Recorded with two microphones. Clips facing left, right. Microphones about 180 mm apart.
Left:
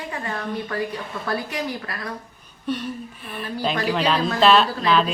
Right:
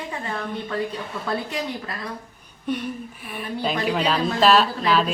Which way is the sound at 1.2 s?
25° right (ahead or behind).